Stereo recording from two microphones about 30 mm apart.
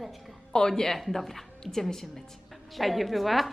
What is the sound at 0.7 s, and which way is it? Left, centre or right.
A woman's voice, centre.